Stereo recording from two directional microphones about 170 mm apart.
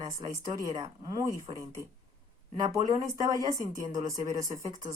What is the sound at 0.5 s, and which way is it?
Speech, 20° right (ahead or behind).